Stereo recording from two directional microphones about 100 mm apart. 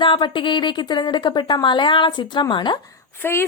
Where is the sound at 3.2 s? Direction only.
25° left (ahead or behind).